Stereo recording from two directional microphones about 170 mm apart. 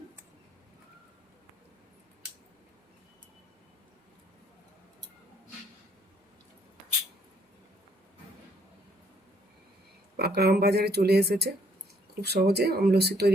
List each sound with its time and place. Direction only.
10.2 s speech: 70° right (ahead or behind)